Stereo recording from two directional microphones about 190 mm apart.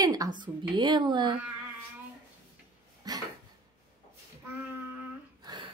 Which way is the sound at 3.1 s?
20° right (ahead or behind).